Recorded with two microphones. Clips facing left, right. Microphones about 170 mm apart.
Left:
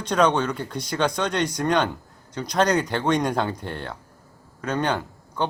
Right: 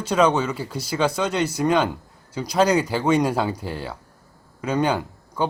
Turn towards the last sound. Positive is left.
turn(degrees=-10)  # may be behind; listen again after turning